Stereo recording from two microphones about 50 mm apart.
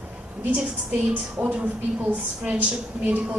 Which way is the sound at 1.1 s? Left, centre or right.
Right.